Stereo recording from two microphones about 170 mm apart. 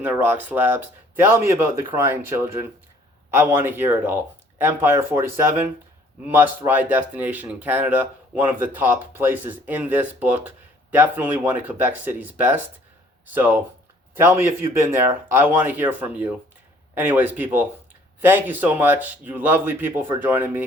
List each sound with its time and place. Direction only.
0.0 s speech: 10° right (ahead or behind)